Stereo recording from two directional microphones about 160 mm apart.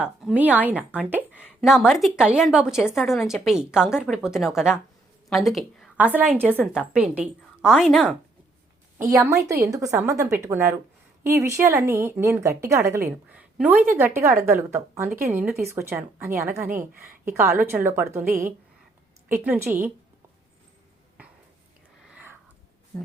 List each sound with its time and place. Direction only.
0.0 s a woman's voice: 5° right (ahead or behind)
6.0 s a woman's voice: 10° right (ahead or behind)
9.0 s a woman's voice: 20° right (ahead or behind)
19.3 s a woman's voice: 15° right (ahead or behind)
21.2 s a sound: 10° right (ahead or behind)